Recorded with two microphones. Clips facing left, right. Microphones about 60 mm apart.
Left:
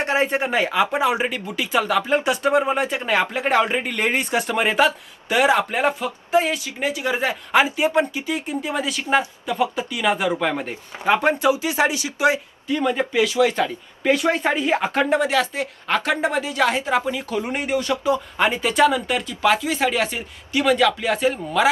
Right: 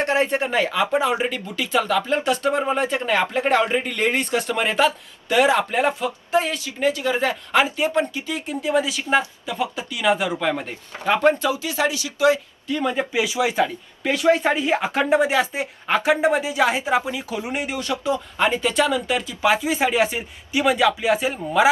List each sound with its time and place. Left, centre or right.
0.0 s speech: centre; by 12.4 s left
12.8 s speech: centre
13.1 s speech: centre
14.0 s speech: centre